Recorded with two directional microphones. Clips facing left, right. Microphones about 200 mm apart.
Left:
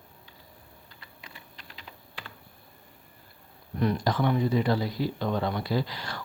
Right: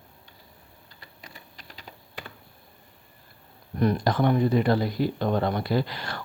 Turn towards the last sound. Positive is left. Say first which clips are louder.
# right 3 dB
turn(degrees=-55)  # may be behind; listen again after turning